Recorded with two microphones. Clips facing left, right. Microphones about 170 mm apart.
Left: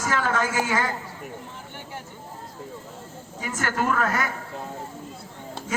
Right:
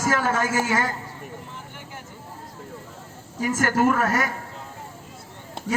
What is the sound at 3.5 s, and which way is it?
Speech, 45° right (ahead or behind).